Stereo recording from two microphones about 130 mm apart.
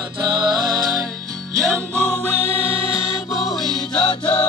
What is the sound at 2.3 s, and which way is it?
Music, 10° right (ahead or behind).